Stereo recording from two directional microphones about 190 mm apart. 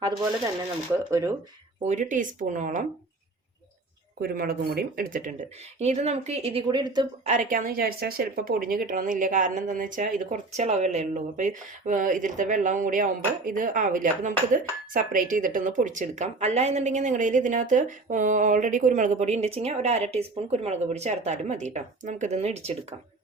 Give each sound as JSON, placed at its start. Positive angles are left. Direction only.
{"t": 0.0, "sound": "speech", "side_deg": -20}
{"t": 1.8, "sound": "speech", "side_deg": -40}
{"t": 4.2, "sound": "a woman's voice", "side_deg": -50}
{"t": 7.3, "sound": "a woman's voice", "side_deg": -40}